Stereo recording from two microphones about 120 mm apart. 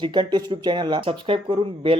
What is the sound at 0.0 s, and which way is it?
Speech, 40° right (ahead or behind).